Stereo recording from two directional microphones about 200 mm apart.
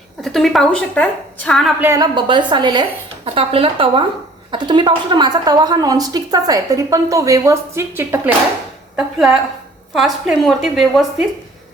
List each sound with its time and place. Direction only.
0.2 s a woman's voice: centre (ahead or behind)
1.8 s a woman's voice: 15° right (ahead or behind)